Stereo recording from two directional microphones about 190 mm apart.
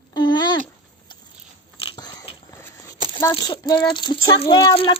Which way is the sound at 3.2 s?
20° left (ahead or behind).